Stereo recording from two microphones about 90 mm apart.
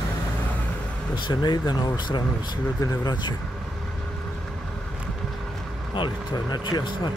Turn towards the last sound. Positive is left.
turn(degrees=55)  # may be behind; listen again after turning